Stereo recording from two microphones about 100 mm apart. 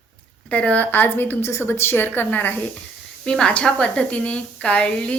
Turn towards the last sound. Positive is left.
turn(degrees=10)  # may be behind; listen again after turning